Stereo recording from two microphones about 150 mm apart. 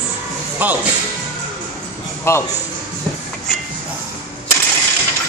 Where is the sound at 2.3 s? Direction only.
15° left (ahead or behind).